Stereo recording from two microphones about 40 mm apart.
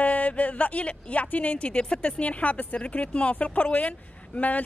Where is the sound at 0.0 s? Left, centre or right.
Left.